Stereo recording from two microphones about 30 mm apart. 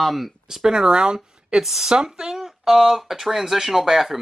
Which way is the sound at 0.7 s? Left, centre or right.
Right.